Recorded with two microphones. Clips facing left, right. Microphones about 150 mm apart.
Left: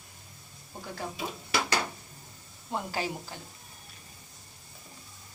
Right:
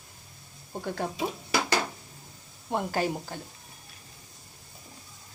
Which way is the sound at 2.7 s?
50° right (ahead or behind).